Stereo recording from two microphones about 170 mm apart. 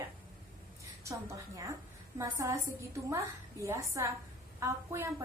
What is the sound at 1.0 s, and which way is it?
A woman's voice, 20° right (ahead or behind).